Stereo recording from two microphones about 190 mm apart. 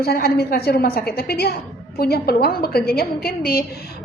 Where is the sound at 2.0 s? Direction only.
55° left (ahead or behind).